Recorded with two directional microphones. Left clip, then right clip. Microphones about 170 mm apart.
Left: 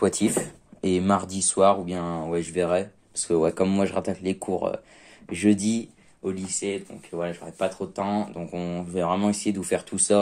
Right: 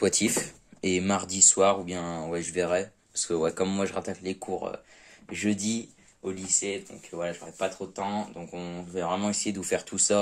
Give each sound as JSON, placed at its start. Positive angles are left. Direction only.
{"t": 0.0, "sound": "speech", "side_deg": -10}
{"t": 5.3, "sound": "speech", "side_deg": 20}
{"t": 9.0, "sound": "speech", "side_deg": 15}